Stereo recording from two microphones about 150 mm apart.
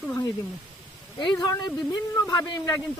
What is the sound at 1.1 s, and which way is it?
Speech, 30° left (ahead or behind).